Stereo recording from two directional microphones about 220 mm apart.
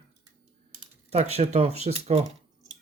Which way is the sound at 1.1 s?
30° right (ahead or behind).